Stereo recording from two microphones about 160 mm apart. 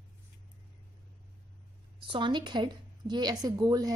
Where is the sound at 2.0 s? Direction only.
30° right (ahead or behind).